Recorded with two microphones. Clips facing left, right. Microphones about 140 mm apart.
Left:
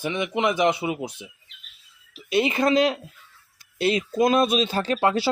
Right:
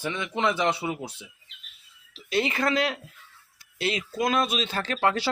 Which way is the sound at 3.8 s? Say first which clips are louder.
Left 6 dB; 40° left (ahead or behind).